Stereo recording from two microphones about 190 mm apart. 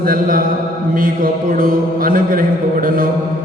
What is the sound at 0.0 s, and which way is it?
A man's voice, 50° right (ahead or behind).